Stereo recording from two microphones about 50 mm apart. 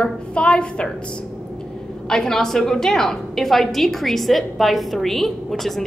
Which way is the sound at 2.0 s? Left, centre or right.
Centre.